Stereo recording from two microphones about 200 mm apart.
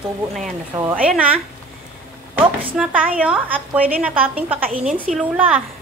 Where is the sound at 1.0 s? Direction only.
5° right (ahead or behind).